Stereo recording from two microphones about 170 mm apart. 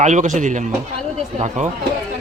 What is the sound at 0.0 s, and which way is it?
Speech, 45° right (ahead or behind).